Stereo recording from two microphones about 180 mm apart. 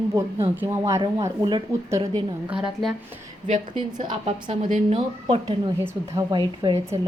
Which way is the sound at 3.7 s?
25° right (ahead or behind).